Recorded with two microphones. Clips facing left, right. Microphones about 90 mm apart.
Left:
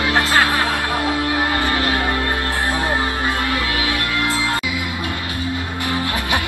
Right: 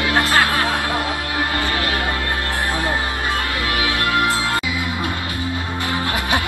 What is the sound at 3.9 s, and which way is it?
Music, 20° right (ahead or behind).